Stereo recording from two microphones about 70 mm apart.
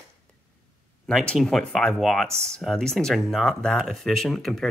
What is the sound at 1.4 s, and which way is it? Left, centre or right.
Speech, centre.